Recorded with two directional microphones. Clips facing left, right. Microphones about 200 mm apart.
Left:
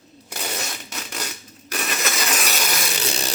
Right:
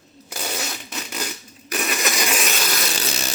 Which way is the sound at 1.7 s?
5° right (ahead or behind).